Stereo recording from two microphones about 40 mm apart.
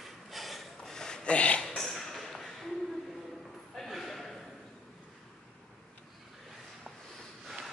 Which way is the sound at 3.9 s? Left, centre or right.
Centre.